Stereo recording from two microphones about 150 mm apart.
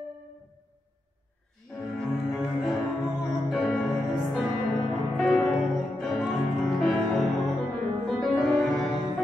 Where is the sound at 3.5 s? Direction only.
Centre (ahead or behind).